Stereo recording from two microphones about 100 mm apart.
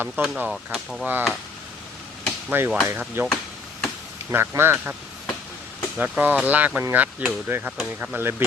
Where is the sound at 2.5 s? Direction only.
20° right (ahead or behind).